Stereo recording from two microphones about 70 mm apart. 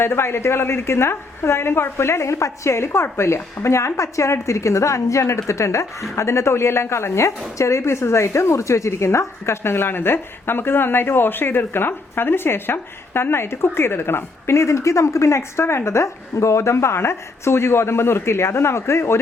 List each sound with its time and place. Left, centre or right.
0.0 s speech: left